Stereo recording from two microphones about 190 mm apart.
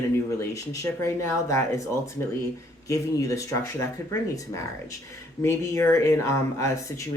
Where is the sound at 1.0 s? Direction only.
15° left (ahead or behind).